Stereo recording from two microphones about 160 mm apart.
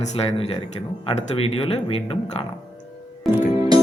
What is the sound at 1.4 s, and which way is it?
Speech, 35° left (ahead or behind).